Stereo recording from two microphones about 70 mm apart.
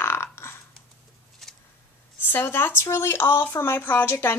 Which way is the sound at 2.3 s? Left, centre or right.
Left.